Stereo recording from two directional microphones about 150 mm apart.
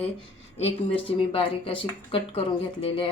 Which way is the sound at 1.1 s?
35° left (ahead or behind).